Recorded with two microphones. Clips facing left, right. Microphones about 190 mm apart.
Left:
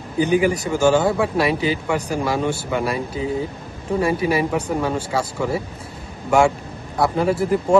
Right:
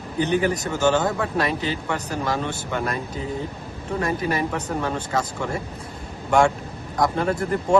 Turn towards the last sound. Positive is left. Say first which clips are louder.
# left 3 dB
turn(degrees=5)  # may be behind; listen again after turning